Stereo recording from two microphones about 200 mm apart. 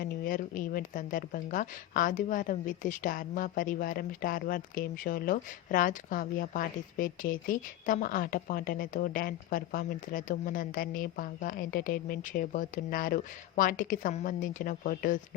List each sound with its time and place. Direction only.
0.0 s speech: 45° left (ahead or behind)